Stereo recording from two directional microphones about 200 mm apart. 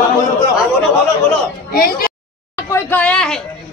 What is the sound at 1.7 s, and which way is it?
Speech, 45° left (ahead or behind).